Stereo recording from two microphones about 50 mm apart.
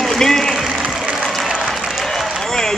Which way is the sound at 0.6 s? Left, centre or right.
Centre.